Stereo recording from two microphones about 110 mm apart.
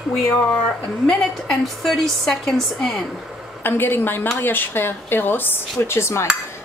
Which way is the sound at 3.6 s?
20° left (ahead or behind).